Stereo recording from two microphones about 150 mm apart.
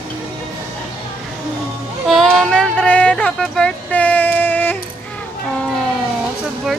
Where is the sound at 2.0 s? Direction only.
Centre (ahead or behind).